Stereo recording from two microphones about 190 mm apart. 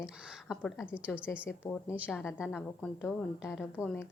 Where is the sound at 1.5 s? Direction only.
15° left (ahead or behind).